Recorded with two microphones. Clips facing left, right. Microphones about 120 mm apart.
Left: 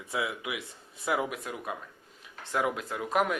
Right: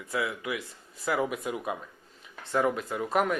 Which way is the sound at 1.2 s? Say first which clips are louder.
Right 4 dB; centre (ahead or behind).